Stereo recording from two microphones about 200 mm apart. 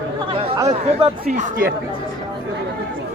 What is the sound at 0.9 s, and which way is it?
Speech, 30° right (ahead or behind).